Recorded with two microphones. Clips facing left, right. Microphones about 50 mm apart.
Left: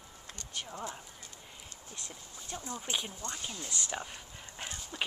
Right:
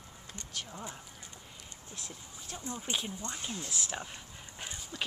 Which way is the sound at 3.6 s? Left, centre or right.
Centre.